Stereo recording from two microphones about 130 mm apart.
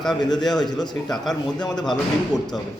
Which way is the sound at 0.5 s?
30° left (ahead or behind).